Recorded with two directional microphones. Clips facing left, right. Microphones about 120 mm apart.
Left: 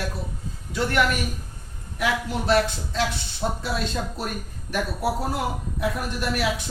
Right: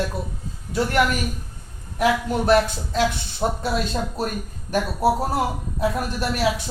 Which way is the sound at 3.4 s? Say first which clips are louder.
Right 4 dB; 55° right (ahead or behind).